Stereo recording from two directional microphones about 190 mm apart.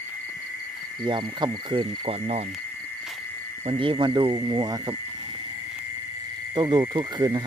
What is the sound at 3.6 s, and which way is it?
Speech, 30° right (ahead or behind).